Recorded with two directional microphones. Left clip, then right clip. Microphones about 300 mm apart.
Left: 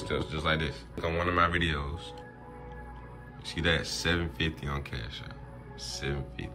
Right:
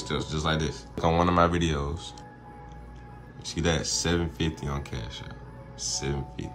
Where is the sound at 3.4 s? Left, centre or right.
Centre.